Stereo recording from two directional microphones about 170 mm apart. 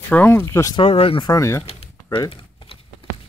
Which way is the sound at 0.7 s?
35° left (ahead or behind).